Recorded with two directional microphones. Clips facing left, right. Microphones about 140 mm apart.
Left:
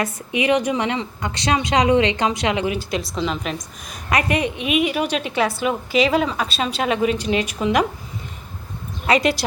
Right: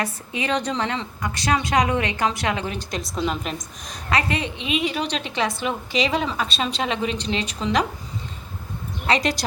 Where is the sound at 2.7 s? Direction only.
Centre (ahead or behind).